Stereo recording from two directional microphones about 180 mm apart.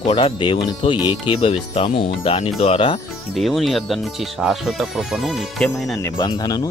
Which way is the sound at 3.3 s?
Centre (ahead or behind).